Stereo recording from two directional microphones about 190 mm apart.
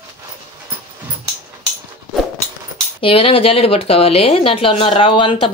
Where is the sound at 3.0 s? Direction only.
30° left (ahead or behind).